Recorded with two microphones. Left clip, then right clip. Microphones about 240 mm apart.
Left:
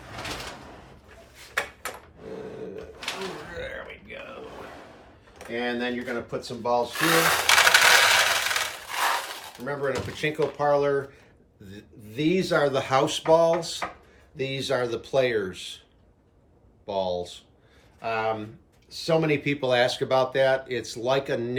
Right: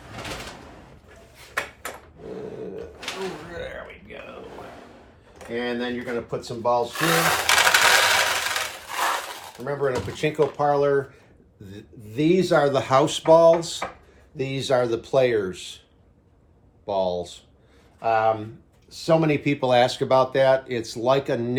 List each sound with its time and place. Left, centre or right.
1.4 s a sound: centre
3.5 s a sound: centre
5.4 s speech: centre
6.9 s coin: centre
9.6 s speech: centre
16.8 s speech: centre